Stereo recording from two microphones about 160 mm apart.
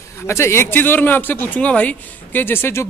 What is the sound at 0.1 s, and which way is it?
A man's voice, 15° left (ahead or behind).